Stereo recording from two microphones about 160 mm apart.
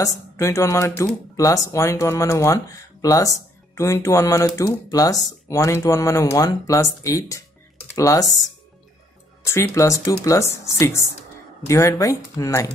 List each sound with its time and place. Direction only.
0.0 s speech: 15° left (ahead or behind)
9.4 s speech: 15° left (ahead or behind)